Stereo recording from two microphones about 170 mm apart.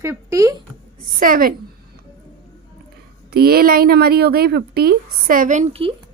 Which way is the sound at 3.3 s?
65° right (ahead or behind).